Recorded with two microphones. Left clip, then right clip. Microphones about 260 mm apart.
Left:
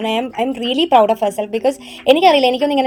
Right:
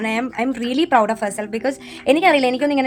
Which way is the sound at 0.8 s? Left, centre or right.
Right.